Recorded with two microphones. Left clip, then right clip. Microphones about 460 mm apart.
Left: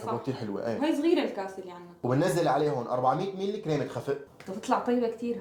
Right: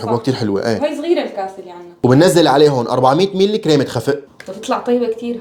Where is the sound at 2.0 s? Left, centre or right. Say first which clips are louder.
Right 16 dB; right.